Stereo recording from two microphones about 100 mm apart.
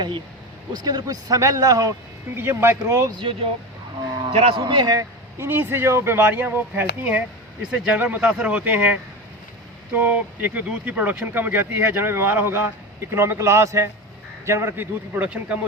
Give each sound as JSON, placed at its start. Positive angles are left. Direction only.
{"t": 0.8, "sound": "speech", "side_deg": -40}
{"t": 2.3, "sound": "speech", "side_deg": -25}
{"t": 3.2, "sound": "speech", "side_deg": -65}
{"t": 4.3, "sound": "speech", "side_deg": -80}
{"t": 4.7, "sound": "a man's voice", "side_deg": -45}
{"t": 5.4, "sound": "speech", "side_deg": -20}